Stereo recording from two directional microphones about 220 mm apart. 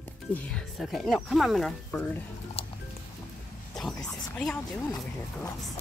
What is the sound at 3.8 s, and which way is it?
Speech, centre (ahead or behind).